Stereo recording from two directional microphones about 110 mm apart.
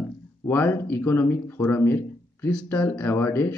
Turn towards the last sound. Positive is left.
turn(degrees=20)  # may be behind; listen again after turning